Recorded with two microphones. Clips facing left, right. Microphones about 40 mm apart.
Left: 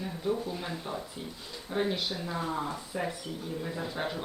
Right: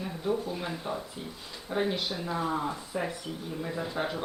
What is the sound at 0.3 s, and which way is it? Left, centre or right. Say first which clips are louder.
Speech: right 1 dB; centre.